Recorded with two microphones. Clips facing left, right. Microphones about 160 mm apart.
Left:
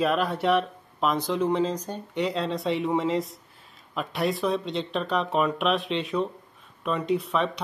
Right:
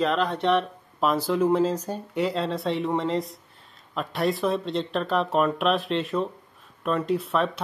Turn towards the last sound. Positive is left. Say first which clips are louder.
# right 1 dB
turn(degrees=0)  # may be behind; listen again after turning